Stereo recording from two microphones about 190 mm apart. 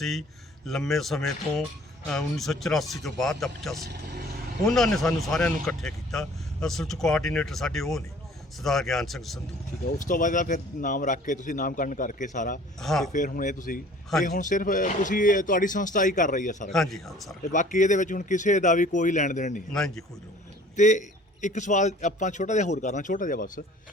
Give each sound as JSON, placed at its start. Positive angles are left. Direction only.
{"t": 0.0, "sound": "speech", "side_deg": 0}
{"t": 10.0, "sound": "speech", "side_deg": 45}
{"t": 12.8, "sound": "speech", "side_deg": 0}
{"t": 13.1, "sound": "speech", "side_deg": 45}
{"t": 16.6, "sound": "speech", "side_deg": 0}
{"t": 17.5, "sound": "speech", "side_deg": 40}
{"t": 19.7, "sound": "speech", "side_deg": 5}
{"t": 20.7, "sound": "speech", "side_deg": 40}